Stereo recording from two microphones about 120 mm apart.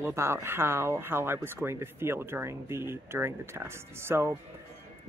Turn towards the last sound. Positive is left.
turn(degrees=-20)  # may be behind; listen again after turning